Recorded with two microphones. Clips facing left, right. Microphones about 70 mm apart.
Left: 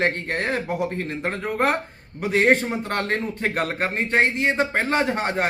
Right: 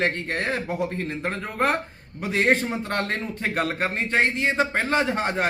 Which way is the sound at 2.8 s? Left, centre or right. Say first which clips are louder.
Left 2 dB; left.